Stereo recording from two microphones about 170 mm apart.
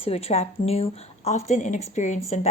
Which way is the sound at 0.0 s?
35° left (ahead or behind).